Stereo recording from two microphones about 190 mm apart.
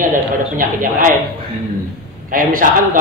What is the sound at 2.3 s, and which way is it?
Speech, 45° right (ahead or behind).